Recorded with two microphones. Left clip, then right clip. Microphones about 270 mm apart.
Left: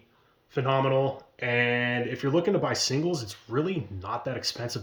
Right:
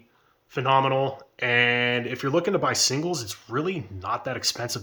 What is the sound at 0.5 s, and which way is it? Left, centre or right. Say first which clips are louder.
Speech: right 4 dB; centre.